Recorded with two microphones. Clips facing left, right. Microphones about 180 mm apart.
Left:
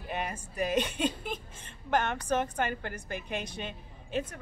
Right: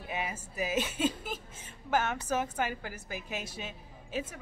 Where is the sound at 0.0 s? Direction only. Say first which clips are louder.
Left 1 dB; 5° right (ahead or behind).